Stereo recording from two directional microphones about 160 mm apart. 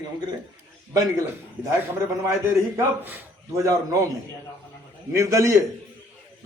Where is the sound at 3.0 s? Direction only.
15° right (ahead or behind).